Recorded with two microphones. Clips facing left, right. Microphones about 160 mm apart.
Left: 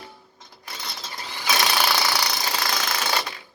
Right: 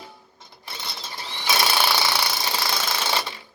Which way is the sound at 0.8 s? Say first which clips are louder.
Even; 5° right (ahead or behind).